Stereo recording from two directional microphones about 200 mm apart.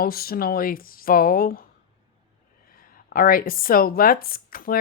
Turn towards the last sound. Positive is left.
turn(degrees=45)  # may be behind; listen again after turning